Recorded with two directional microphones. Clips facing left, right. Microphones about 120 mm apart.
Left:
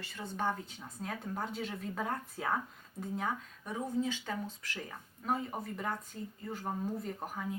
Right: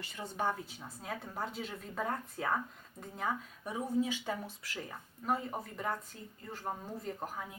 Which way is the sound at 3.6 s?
10° right (ahead or behind).